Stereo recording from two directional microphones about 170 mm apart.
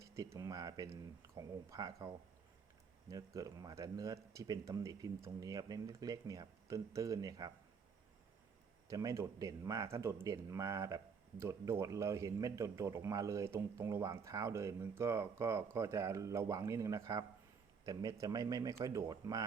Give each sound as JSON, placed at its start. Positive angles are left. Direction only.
{"t": 0.0, "sound": "a sound", "side_deg": -20}
{"t": 0.3, "sound": "speech", "side_deg": -20}
{"t": 8.9, "sound": "speech", "side_deg": -20}